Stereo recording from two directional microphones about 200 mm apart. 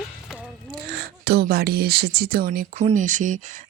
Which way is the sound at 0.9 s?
55° right (ahead or behind).